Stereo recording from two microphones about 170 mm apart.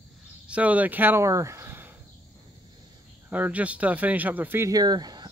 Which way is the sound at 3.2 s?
10° right (ahead or behind).